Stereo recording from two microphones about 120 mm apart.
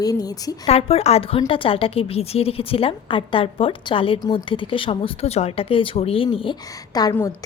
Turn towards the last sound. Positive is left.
turn(degrees=15)  # may be behind; listen again after turning